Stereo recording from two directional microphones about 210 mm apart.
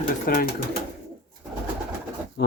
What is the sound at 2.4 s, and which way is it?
Speech, 55° left (ahead or behind).